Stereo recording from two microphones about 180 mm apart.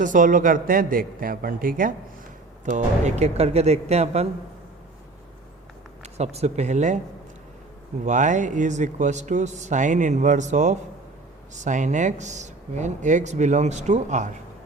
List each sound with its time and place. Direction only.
0.0 s speech: 45° right (ahead or behind)
6.0 s speech: 40° right (ahead or behind)
8.0 s speech: 45° right (ahead or behind)